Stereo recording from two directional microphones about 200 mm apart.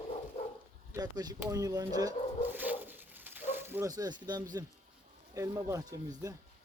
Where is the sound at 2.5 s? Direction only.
10° right (ahead or behind).